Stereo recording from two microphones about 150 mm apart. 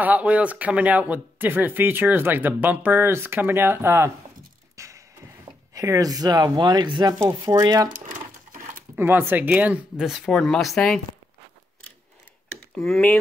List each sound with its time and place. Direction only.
0.0 s speech: 10° right (ahead or behind)
4.7 s music: 20° right (ahead or behind)
5.7 s speech: 25° right (ahead or behind)
7.9 s a sound: 60° right (ahead or behind)
8.9 s speech: 15° right (ahead or behind); by 11.0 s centre (ahead or behind)
12.7 s speech: 5° left (ahead or behind)